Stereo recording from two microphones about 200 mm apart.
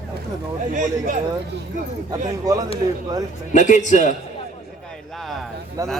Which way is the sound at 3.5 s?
40° left (ahead or behind).